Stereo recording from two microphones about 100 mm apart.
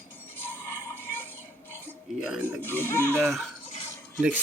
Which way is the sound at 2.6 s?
20° left (ahead or behind).